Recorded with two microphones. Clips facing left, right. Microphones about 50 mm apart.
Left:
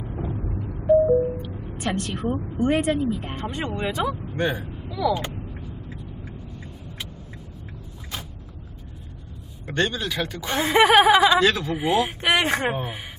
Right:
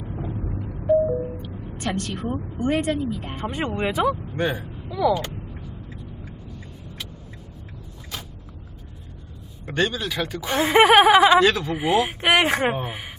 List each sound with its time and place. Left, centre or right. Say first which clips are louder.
0.0 s music: left 1 dB; centre
1.5 s a woman's voice: even; centre
3.3 s speech: right 2 dB; centre
4.9 s speech: right 3 dB; centre
5.1 s a sound: right 1 dB; centre
9.6 s speech: right 1 dB; centre
10.8 s speech: right 1 dB; centre
11.3 s speech: right 2 dB; centre